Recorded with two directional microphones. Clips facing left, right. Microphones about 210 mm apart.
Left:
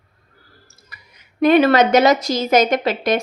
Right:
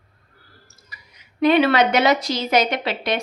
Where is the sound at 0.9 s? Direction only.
50° left (ahead or behind).